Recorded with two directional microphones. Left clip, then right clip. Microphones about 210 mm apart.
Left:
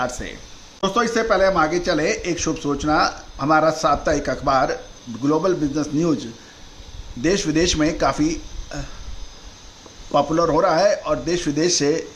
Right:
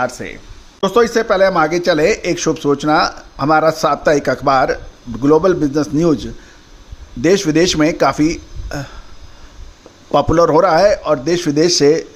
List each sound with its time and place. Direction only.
0.0 s speech: 25° right (ahead or behind)
0.8 s speech: 40° right (ahead or behind)
10.1 s speech: 40° right (ahead or behind)